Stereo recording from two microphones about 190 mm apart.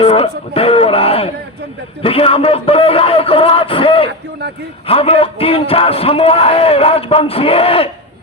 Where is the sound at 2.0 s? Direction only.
30° left (ahead or behind).